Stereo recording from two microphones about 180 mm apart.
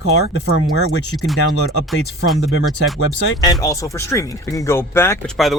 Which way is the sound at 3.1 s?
20° left (ahead or behind).